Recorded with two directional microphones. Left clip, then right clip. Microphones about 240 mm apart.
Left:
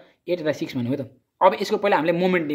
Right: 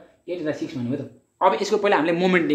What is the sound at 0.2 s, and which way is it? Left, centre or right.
Speech, left.